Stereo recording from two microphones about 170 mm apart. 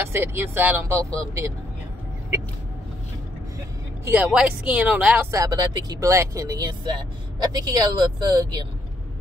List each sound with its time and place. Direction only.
0.0 s speech: 15° right (ahead or behind)
4.0 s speech: 10° right (ahead or behind)
5.4 s speech: 20° right (ahead or behind)